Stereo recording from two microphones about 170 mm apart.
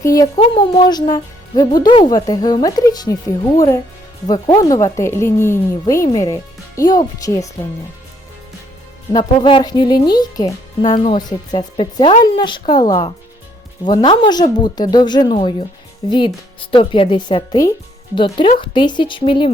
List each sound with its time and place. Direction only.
0.0 s speech: 20° left (ahead or behind)
9.1 s speech: 30° left (ahead or behind)